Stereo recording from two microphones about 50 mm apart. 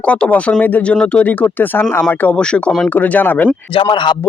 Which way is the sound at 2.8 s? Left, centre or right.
Left.